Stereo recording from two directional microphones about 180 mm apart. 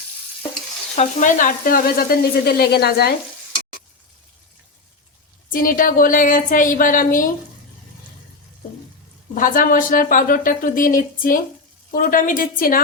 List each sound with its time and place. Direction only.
0.9 s sizzle: 45° left (ahead or behind); by 3.1 s 60° left (ahead or behind)
5.5 s sizzle: 50° left (ahead or behind)
9.3 s sizzle: 50° left (ahead or behind)